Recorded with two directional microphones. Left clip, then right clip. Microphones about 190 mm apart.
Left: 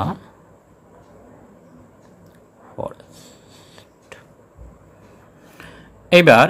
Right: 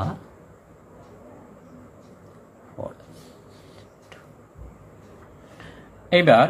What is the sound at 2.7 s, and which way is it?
Pig, 35° left (ahead or behind).